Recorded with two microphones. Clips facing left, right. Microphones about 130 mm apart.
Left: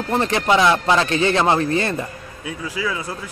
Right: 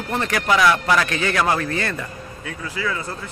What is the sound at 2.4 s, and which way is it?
Speech, 15° left (ahead or behind).